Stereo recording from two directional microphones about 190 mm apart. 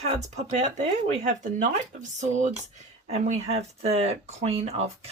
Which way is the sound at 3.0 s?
35° right (ahead or behind).